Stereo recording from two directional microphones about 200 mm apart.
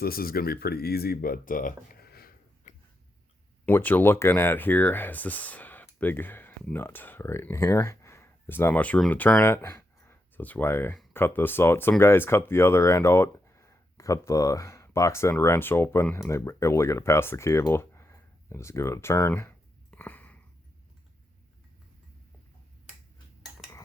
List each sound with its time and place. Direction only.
0.0 s speech: 50° left (ahead or behind)
3.7 s speech: 10° left (ahead or behind)